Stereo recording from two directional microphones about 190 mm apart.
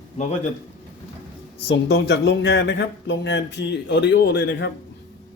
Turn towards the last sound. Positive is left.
turn(degrees=65)  # may be behind; listen again after turning